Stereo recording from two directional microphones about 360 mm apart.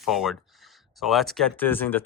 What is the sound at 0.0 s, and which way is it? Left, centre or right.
Speech, centre.